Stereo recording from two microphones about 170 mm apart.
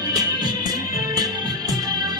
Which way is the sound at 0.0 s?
20° right (ahead or behind).